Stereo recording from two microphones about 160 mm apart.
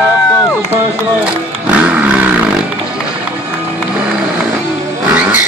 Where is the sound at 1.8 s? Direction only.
10° right (ahead or behind).